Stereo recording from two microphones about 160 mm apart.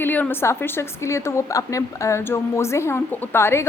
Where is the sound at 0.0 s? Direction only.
10° left (ahead or behind).